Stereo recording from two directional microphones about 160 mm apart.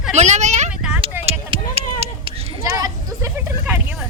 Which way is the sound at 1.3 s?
40° right (ahead or behind).